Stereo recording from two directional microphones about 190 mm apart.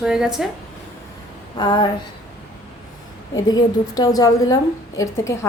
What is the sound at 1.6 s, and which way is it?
Speech, 25° left (ahead or behind).